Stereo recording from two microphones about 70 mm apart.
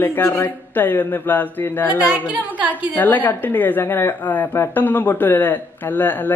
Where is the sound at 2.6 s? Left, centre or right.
Right.